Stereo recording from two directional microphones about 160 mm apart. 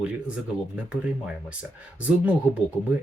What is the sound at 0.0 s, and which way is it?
Speech, 10° right (ahead or behind).